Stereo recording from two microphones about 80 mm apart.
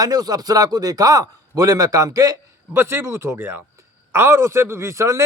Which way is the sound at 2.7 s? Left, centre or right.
Right.